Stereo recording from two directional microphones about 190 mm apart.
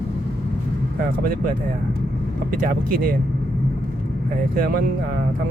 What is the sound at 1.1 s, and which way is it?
Speech, 50° right (ahead or behind).